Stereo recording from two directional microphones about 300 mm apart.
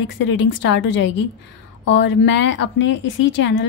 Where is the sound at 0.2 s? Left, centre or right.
Left.